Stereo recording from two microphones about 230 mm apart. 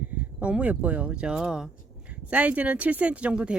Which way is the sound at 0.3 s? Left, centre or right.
Centre.